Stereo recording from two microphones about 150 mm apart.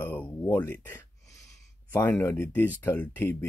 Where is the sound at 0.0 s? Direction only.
10° left (ahead or behind).